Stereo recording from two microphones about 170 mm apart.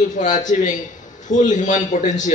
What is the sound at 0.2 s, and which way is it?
A man's voice, 45° left (ahead or behind).